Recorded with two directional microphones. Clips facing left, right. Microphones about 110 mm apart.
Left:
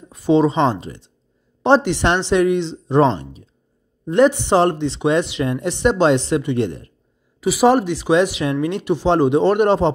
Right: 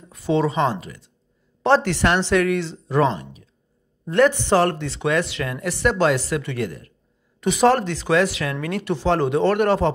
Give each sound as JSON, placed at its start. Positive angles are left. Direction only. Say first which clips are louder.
{"t": 0.1, "sound": "speech", "louder": "left 5 dB", "side_deg": 20}
{"t": 1.6, "sound": "speech", "louder": "left 3 dB", "side_deg": 20}
{"t": 4.0, "sound": "speech", "louder": "left 3 dB", "side_deg": 20}
{"t": 7.3, "sound": "speech", "louder": "left 3 dB", "side_deg": 5}